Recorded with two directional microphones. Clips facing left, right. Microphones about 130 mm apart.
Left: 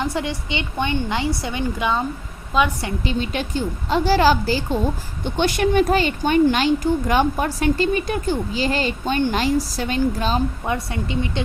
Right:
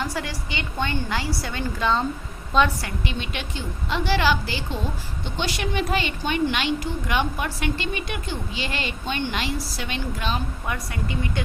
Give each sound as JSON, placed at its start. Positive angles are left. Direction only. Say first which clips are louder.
{"t": 0.0, "sound": "a woman's voice", "louder": "left 5 dB", "side_deg": 20}
{"t": 3.0, "sound": "speech", "louder": "left 9 dB", "side_deg": 35}
{"t": 5.2, "sound": "speech", "louder": "left 9 dB", "side_deg": 50}